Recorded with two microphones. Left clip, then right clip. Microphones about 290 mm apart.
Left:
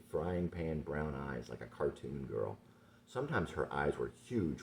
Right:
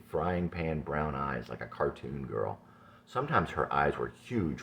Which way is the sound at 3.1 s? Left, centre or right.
Right.